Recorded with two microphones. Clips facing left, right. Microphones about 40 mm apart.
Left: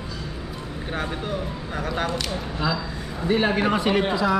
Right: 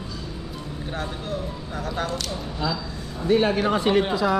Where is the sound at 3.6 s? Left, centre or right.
Left.